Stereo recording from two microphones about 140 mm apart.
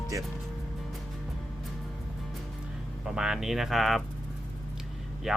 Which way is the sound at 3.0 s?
5° right (ahead or behind).